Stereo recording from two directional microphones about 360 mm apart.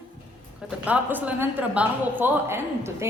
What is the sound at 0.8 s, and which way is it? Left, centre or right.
A woman's voice, centre.